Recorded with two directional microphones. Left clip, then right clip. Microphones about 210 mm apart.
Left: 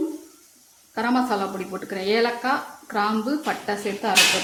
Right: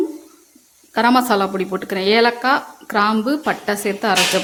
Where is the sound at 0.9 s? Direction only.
45° right (ahead or behind).